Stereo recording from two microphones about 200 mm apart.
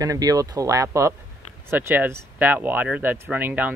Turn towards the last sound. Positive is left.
turn(degrees=-10)  # may be behind; listen again after turning